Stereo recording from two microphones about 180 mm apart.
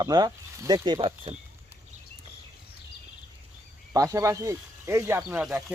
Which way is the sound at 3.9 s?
20° right (ahead or behind).